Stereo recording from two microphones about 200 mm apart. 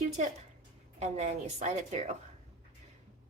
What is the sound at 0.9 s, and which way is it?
Speech, 35° right (ahead or behind).